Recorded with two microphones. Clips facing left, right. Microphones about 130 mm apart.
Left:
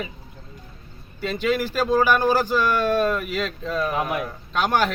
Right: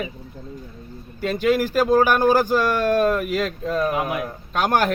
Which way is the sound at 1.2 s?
45° right (ahead or behind).